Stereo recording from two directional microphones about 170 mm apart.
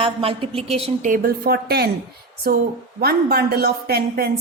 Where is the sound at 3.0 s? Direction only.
65° right (ahead or behind).